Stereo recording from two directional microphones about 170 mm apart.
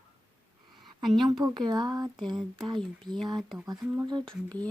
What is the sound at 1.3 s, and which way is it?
Speech, 25° right (ahead or behind).